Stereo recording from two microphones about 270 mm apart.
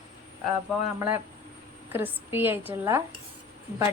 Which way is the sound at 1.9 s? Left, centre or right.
Centre.